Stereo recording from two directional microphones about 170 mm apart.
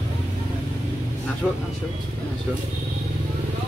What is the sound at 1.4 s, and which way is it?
Speech, 5° right (ahead or behind).